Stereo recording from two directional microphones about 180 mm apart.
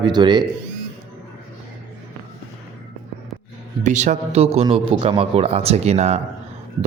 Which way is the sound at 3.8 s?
40° right (ahead or behind).